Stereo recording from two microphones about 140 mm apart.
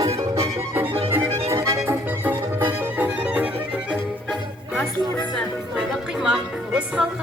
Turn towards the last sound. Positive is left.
turn(degrees=-10)  # may be behind; listen again after turning